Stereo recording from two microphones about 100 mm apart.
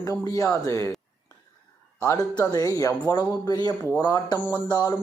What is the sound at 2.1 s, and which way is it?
Speech, 35° left (ahead or behind).